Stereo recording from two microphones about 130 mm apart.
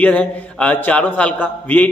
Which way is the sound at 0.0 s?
10° left (ahead or behind).